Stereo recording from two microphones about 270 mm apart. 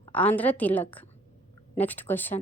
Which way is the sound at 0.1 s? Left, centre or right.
Centre.